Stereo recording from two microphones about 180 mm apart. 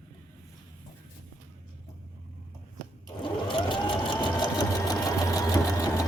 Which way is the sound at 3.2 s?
25° left (ahead or behind).